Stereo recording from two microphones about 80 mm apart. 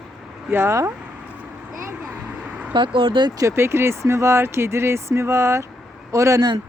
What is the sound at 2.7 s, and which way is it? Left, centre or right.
Speech, right.